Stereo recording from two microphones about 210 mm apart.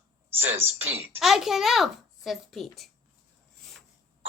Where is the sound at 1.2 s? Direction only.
Centre (ahead or behind).